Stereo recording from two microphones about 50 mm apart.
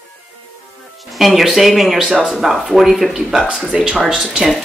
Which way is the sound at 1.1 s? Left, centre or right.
Centre.